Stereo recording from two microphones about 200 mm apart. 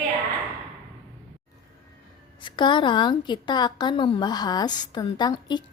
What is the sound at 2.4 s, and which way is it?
A woman's voice, 25° left (ahead or behind).